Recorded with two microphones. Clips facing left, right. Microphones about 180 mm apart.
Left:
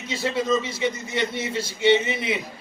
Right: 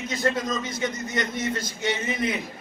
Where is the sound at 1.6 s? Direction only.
30° left (ahead or behind).